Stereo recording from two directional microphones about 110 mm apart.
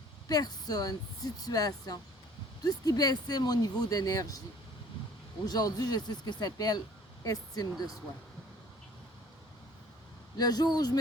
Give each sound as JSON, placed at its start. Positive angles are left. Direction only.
{"t": 0.3, "sound": "speech", "side_deg": 35}
{"t": 5.5, "sound": "speech", "side_deg": 35}
{"t": 10.3, "sound": "speech", "side_deg": 35}